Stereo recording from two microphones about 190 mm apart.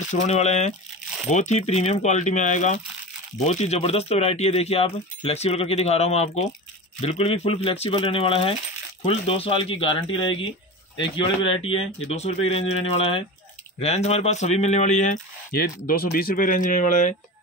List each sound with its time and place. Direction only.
0.1 s speech: 35° left (ahead or behind)